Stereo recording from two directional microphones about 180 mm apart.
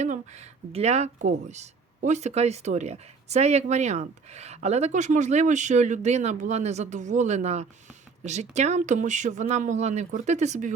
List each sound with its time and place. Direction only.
0.0 s speech: 40° right (ahead or behind)